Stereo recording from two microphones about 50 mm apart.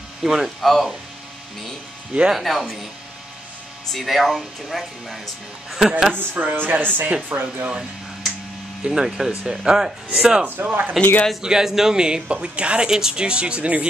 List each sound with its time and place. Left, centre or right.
0.2 s speech: centre
2.3 s speech: centre
3.9 s speech: centre
6.3 s speech: right
7.0 s speech: right
7.3 s speech: right
8.8 s speech: centre
10.4 s speech: right
11.4 s speech: centre